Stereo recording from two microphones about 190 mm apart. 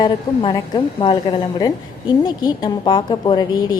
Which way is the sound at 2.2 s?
20° left (ahead or behind).